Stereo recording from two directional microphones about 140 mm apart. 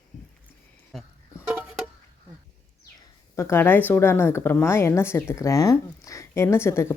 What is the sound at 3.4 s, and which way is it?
A woman's voice, 15° left (ahead or behind).